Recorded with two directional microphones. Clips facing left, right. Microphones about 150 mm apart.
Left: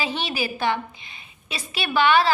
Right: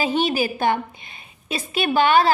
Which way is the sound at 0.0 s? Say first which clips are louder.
Right 6 dB; 45° right (ahead or behind).